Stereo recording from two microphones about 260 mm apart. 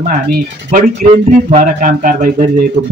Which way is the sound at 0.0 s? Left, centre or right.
Right.